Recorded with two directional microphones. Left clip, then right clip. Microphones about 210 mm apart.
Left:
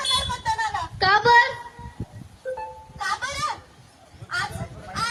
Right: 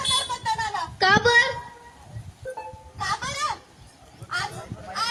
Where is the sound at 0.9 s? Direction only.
55° right (ahead or behind).